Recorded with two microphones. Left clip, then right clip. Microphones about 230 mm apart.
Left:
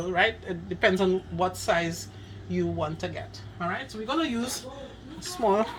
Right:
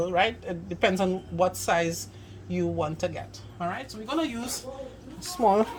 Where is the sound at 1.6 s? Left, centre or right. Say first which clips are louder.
Right 1 dB; right.